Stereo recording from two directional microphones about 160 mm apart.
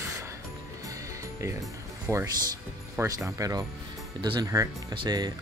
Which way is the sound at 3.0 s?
15° right (ahead or behind).